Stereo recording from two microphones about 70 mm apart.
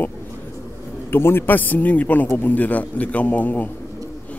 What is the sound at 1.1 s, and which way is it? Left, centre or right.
A man's voice, left.